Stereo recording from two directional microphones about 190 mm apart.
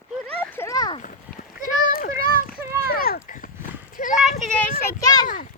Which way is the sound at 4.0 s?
40° left (ahead or behind).